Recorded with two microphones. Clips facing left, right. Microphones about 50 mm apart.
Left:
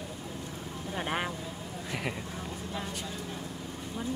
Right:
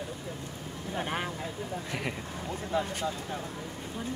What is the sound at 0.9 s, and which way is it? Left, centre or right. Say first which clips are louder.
Speech: even; centre.